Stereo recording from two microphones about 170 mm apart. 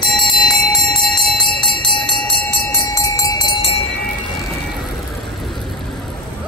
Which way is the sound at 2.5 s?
10° left (ahead or behind).